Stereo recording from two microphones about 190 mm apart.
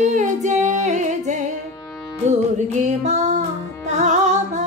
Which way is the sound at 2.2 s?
40° right (ahead or behind).